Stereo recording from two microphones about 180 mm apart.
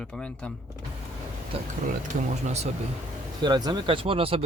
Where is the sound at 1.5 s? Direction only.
35° right (ahead or behind).